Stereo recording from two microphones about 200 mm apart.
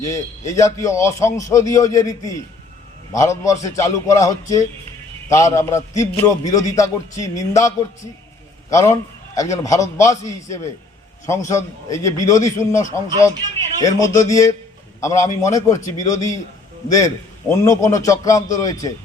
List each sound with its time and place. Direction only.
0.0 s a man's voice: 15° left (ahead or behind)
17.5 s a man's voice: 15° left (ahead or behind)